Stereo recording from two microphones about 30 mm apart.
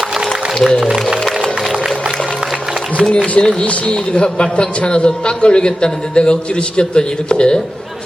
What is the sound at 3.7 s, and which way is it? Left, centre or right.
A man's voice, left.